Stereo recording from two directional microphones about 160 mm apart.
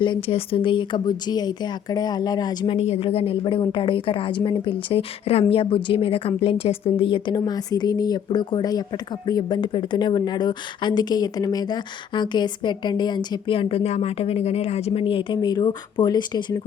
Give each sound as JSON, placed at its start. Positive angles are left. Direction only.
{"t": 0.0, "sound": "speech", "side_deg": 35}
{"t": 2.7, "sound": "a woman's voice", "side_deg": 40}